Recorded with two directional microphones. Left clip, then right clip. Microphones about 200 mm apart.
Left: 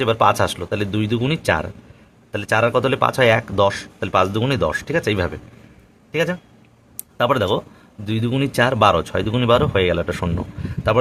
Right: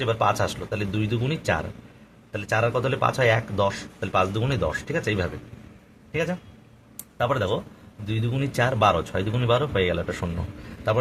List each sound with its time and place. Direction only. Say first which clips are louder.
0.0 s a man's voice: left 7 dB; 50° left (ahead or behind)
6.9 s a sound: left 6 dB; 50° left (ahead or behind)
8.0 s speech: left 7 dB; 50° left (ahead or behind)